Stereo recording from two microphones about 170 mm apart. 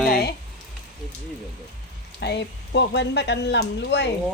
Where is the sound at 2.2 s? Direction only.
85° left.